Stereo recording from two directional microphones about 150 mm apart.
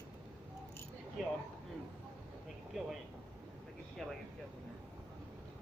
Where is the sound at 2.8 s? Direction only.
Centre (ahead or behind).